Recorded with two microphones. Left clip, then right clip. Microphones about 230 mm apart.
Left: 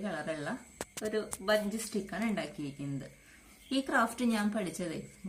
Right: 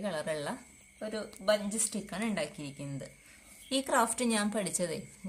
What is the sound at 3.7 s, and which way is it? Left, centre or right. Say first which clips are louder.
Speech: right 1 dB; right.